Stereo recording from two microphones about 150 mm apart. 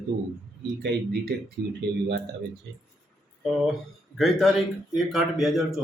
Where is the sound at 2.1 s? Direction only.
90° right.